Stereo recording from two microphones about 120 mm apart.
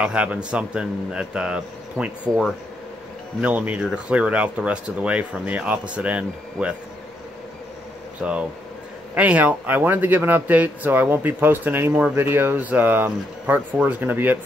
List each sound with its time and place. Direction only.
0.0 s speech: 10° right (ahead or behind)
8.2 s speech: 10° right (ahead or behind)